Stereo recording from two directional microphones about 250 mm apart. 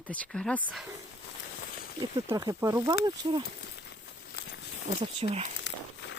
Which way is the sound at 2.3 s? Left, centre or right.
Centre.